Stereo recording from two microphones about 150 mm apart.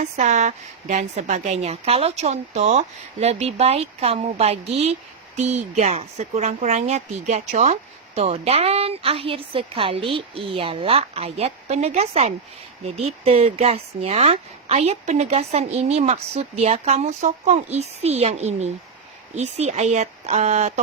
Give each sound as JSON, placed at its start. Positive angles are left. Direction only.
{"t": 0.0, "sound": "speech", "side_deg": -50}